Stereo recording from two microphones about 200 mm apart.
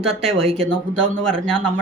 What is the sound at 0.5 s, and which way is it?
Speech, 5° left (ahead or behind).